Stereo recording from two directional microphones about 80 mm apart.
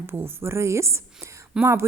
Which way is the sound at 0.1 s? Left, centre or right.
Right.